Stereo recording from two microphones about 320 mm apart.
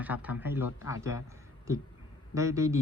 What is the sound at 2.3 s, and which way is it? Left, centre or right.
Speech, centre.